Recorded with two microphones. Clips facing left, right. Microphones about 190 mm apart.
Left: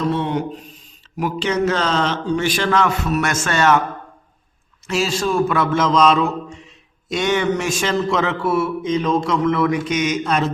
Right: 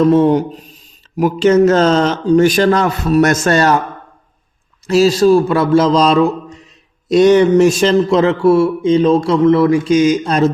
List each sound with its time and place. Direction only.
0.1 s a man's voice: 40° right (ahead or behind)
4.9 s a man's voice: 40° right (ahead or behind)